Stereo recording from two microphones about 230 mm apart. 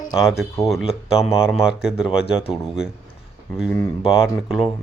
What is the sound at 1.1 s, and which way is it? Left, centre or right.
Speech, centre.